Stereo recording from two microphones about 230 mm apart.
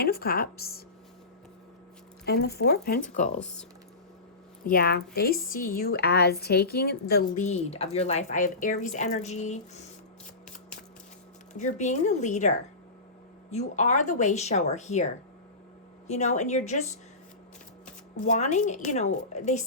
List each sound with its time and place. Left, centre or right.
0.0 s a woman's voice: left
2.2 s a woman's voice: left
3.2 s speech: centre
4.6 s a woman's voice: left
11.5 s a woman's voice: left
18.2 s a woman's voice: left